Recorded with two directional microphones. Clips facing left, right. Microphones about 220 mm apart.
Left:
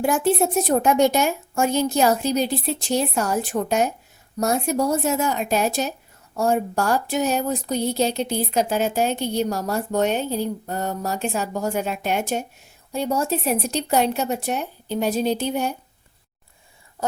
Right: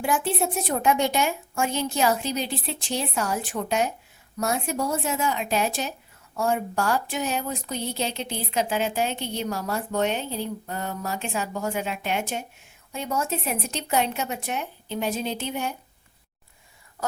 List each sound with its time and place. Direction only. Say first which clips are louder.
0.0 s a woman's voice: left 6 dB; 40° left (ahead or behind)